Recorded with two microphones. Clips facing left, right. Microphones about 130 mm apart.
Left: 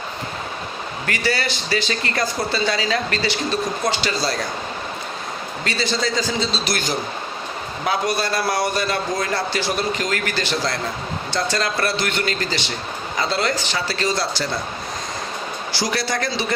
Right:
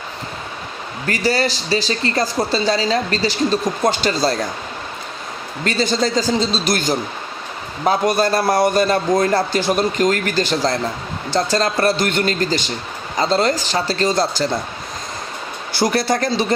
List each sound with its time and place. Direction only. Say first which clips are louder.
1.0 s speech: right 5 dB; 40° right (ahead or behind)
5.6 s a man's voice: right 5 dB; 45° right (ahead or behind)
15.7 s a man's voice: right 7 dB; 50° right (ahead or behind)